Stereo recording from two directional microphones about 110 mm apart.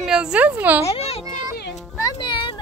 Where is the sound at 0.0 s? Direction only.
5° right (ahead or behind).